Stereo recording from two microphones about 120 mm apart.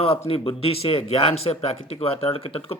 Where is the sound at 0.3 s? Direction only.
50° left (ahead or behind).